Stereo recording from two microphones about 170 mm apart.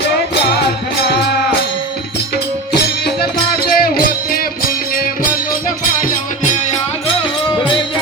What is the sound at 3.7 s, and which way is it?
Music, 60° left (ahead or behind).